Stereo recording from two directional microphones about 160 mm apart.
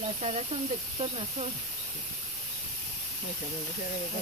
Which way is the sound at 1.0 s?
35° right (ahead or behind).